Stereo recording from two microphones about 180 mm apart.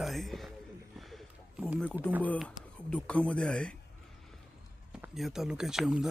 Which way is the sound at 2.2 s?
10° left (ahead or behind).